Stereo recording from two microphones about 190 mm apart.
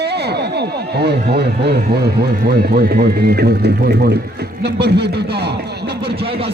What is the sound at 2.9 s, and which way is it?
Speech, 60° right (ahead or behind).